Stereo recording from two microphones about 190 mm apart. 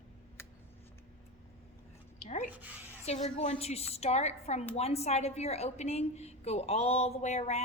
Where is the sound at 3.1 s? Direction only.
35° left (ahead or behind).